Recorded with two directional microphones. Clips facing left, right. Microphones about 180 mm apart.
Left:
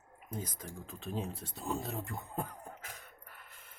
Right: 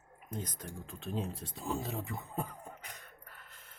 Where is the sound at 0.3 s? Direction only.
10° left (ahead or behind).